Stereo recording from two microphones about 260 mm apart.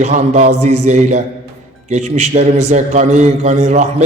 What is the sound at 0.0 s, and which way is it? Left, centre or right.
Speech, right.